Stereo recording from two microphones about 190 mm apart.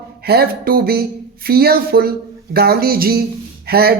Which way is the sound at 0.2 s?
55° right (ahead or behind).